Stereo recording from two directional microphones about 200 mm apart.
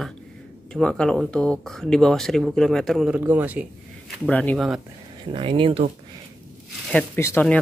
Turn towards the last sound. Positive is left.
turn(degrees=10)  # may be behind; listen again after turning